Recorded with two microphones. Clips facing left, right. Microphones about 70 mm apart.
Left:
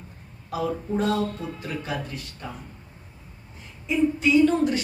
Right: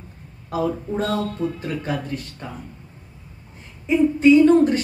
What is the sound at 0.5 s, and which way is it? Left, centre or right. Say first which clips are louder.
Speech: right 3 dB; right.